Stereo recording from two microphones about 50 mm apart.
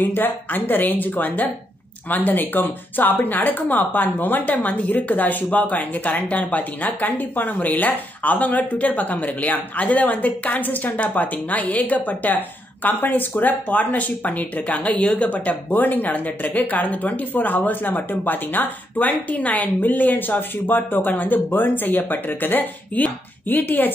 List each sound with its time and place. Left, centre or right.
0.0 s speech: left